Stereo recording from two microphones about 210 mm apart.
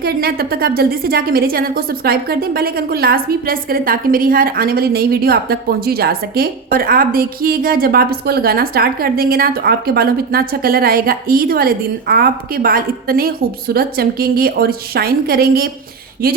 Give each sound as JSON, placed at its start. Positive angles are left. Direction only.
{"t": 0.0, "sound": "a woman's voice", "side_deg": -45}